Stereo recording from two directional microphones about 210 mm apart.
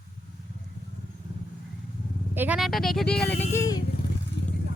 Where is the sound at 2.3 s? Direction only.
5° right (ahead or behind).